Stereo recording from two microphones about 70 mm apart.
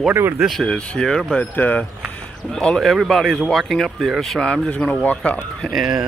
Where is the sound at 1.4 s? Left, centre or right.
Left.